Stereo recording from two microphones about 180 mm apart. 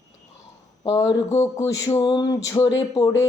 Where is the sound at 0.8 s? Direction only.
20° left (ahead or behind).